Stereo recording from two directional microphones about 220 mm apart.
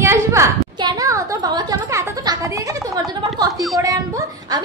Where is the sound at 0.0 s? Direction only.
10° right (ahead or behind).